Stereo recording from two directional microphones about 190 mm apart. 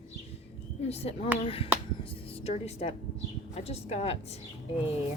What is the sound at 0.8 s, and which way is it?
A woman's voice, 35° left (ahead or behind).